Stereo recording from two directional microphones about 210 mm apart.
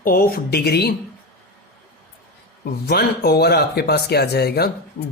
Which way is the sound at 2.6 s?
50° left (ahead or behind).